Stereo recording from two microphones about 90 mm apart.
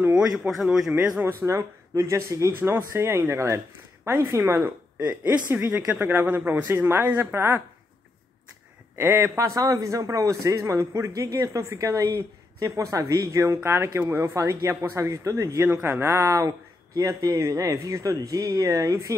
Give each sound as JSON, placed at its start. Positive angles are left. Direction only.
{"t": 0.1, "sound": "a man's voice", "side_deg": -10}
{"t": 1.4, "sound": "speech", "side_deg": -35}
{"t": 8.9, "sound": "speech", "side_deg": -25}